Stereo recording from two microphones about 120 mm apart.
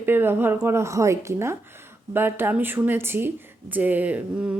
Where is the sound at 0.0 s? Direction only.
20° right (ahead or behind).